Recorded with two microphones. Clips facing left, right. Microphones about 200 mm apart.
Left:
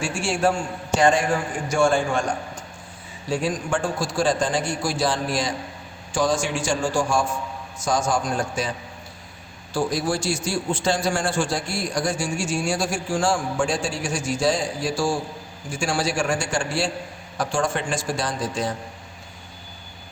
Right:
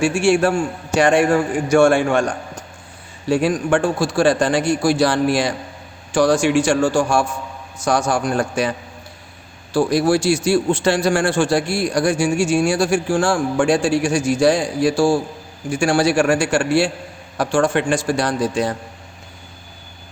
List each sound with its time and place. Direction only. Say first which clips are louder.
0.0 s a man's voice: right 7 dB; 70° right (ahead or behind)
9.7 s a man's voice: right 8 dB; 70° right (ahead or behind)